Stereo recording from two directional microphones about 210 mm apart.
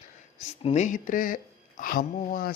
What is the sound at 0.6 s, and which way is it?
Speech, 35° left (ahead or behind).